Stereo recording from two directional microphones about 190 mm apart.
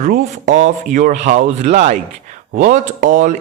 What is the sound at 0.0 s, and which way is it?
Speech, 40° right (ahead or behind).